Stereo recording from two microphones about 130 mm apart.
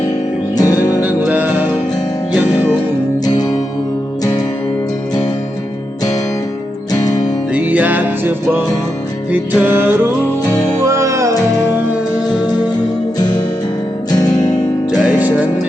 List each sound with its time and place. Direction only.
0.5 s music: 30° left (ahead or behind)
1.0 s music: 10° right (ahead or behind)
3.2 s music: 30° left (ahead or behind)
7.0 s music: 30° left (ahead or behind)
7.5 s music: 10° right (ahead or behind)
13.1 s music: 30° left (ahead or behind)
14.8 s music: 10° right (ahead or behind)